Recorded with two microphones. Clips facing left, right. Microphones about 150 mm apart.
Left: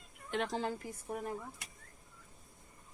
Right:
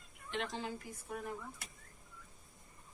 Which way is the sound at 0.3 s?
45° left (ahead or behind).